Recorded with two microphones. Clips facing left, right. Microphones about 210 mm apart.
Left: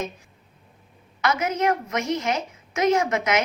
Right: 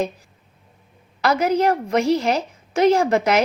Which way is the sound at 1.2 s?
35° right (ahead or behind).